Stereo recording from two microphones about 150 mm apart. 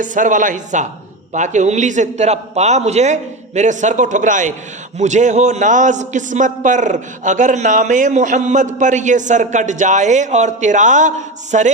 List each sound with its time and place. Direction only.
0.0 s a man's voice: 60° right (ahead or behind)